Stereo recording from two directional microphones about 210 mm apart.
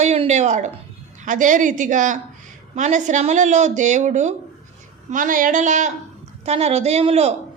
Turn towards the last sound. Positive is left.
turn(degrees=-30)  # may be behind; listen again after turning